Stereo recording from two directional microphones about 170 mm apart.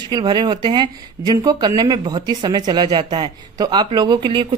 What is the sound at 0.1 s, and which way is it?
Speech, 25° right (ahead or behind).